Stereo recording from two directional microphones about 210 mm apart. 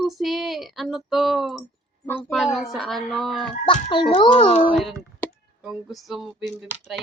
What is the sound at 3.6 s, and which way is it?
A child's voice, 25° left (ahead or behind).